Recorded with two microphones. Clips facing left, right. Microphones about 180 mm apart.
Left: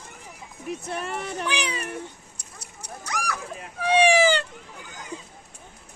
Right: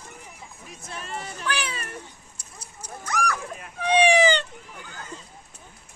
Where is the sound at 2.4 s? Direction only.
70° left (ahead or behind).